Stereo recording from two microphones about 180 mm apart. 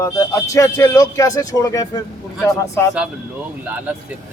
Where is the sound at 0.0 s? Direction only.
15° left (ahead or behind).